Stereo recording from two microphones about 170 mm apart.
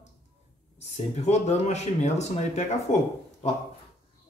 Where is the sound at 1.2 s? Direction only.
40° left (ahead or behind).